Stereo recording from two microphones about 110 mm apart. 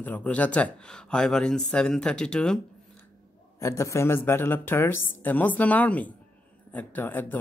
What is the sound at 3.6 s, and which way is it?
Speech, 25° left (ahead or behind).